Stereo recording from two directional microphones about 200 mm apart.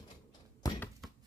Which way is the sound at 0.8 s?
Centre (ahead or behind).